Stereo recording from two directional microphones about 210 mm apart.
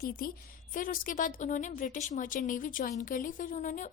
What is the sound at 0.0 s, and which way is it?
A woman's voice, 45° left (ahead or behind).